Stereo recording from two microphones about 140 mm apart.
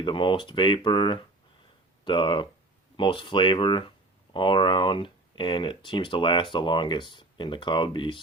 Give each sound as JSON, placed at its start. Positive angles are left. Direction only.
{"t": 0.0, "sound": "speech", "side_deg": 35}